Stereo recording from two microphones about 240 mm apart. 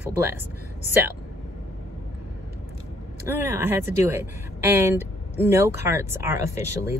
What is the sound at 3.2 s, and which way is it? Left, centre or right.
Speech, centre.